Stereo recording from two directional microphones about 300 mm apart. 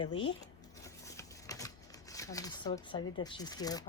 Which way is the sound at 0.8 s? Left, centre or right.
Centre.